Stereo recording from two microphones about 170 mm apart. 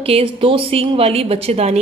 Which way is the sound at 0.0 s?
35° right (ahead or behind).